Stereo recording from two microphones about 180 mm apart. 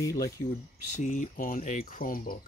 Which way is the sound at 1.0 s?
45° left (ahead or behind).